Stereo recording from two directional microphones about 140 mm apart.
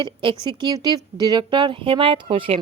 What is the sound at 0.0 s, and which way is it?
A woman's voice, 35° right (ahead or behind).